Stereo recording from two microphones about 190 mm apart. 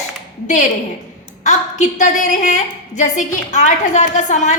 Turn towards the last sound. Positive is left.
turn(degrees=40)  # may be behind; listen again after turning